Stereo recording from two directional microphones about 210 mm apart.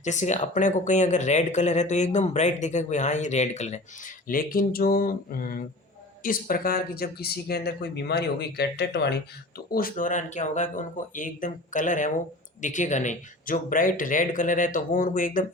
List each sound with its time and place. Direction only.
0.0 s speech: 35° left (ahead or behind); by 9.1 s 55° left (ahead or behind)
9.7 s speech: 40° left (ahead or behind)